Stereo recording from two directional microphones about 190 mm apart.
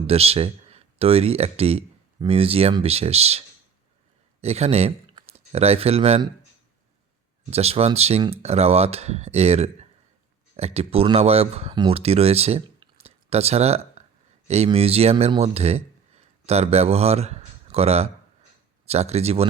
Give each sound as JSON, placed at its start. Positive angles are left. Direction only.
{"t": 0.1, "sound": "speech", "side_deg": -30}
{"t": 7.5, "sound": "speech", "side_deg": -35}